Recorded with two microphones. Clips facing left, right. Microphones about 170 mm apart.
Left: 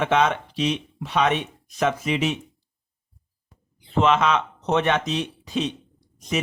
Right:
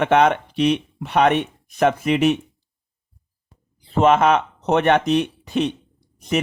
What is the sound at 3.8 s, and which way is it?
Speech, 45° right (ahead or behind).